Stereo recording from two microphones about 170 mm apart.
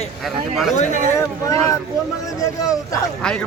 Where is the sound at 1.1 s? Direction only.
15° left (ahead or behind).